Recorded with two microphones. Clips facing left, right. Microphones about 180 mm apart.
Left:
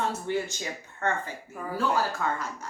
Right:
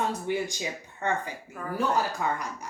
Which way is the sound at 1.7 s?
15° right (ahead or behind).